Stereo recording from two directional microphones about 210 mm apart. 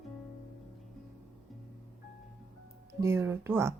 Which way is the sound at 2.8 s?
15° right (ahead or behind).